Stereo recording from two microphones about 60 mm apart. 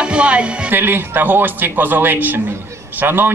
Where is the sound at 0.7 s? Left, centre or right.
Right.